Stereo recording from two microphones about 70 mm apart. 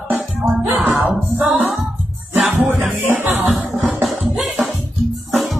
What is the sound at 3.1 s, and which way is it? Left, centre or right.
Music, right.